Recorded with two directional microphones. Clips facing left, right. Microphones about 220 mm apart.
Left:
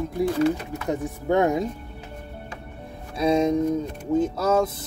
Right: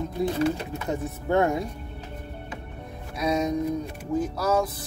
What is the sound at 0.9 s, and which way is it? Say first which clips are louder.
Speech: left 2 dB; 15° left (ahead or behind).